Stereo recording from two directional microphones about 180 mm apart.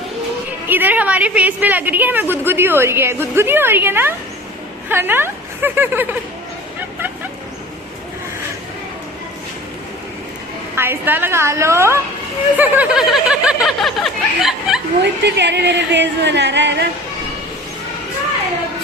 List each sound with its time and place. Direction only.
0.7 s a woman's voice: 10° right (ahead or behind)
10.8 s a woman's voice: 10° right (ahead or behind)
12.5 s snicker: 10° right (ahead or behind)
15.2 s speech: 75° right (ahead or behind)